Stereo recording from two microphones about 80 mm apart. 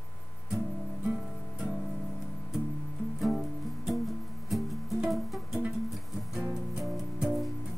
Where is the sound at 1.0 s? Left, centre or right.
Centre.